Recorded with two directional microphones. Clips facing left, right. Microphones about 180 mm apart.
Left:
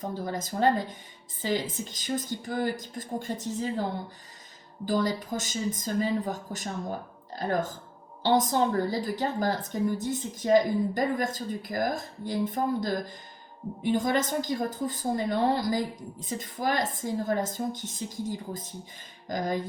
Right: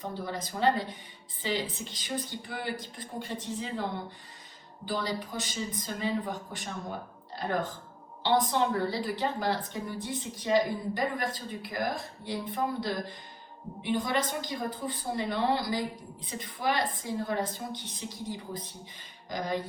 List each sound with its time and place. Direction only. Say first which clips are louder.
0.0 s a woman's voice: left 3 dB; 45° left (ahead or behind)
4.9 s a woman's voice: left 6 dB; 45° left (ahead or behind)
8.2 s a woman's voice: left 3 dB; 45° left (ahead or behind)